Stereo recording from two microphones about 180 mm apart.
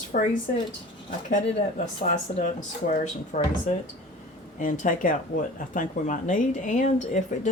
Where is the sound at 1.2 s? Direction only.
40° left (ahead or behind).